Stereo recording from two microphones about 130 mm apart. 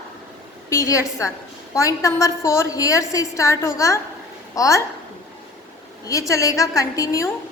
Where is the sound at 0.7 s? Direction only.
25° left (ahead or behind).